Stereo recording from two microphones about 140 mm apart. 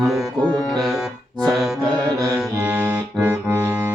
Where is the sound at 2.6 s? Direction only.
10° right (ahead or behind).